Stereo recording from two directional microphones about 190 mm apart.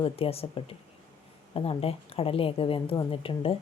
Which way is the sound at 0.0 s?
30° left (ahead or behind).